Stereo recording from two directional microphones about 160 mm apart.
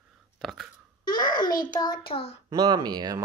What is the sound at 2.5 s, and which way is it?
Speech, 25° right (ahead or behind).